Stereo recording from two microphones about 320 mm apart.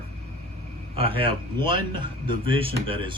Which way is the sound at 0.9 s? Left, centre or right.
Centre.